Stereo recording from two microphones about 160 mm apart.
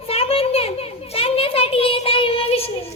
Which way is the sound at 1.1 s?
35° left (ahead or behind).